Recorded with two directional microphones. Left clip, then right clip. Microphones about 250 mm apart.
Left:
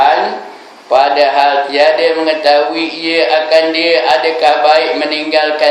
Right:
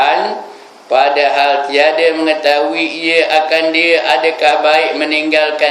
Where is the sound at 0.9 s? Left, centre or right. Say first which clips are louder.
Left 1 dB; right.